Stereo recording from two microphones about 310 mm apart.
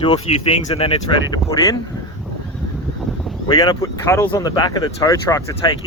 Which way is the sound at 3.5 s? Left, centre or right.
Centre.